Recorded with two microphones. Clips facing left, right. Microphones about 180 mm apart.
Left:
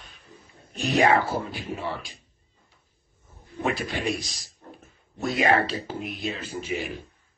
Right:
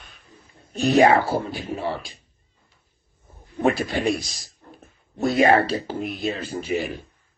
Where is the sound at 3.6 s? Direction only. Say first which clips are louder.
Right 6 dB; 40° right (ahead or behind).